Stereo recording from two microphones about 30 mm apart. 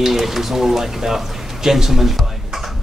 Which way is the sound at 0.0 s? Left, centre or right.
Centre.